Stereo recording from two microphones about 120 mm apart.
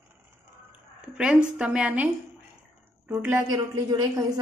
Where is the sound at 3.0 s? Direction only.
15° right (ahead or behind).